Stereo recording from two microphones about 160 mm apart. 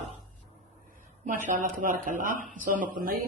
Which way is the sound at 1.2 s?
55° right (ahead or behind).